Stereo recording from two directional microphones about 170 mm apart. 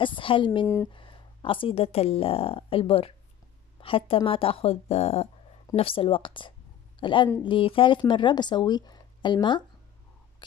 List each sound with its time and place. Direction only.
0.0 s a woman's voice: 30° left (ahead or behind)